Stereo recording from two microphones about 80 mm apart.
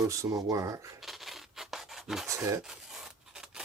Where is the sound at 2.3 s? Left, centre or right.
Right.